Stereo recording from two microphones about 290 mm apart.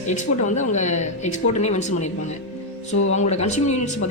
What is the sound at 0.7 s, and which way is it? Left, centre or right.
Speech, left.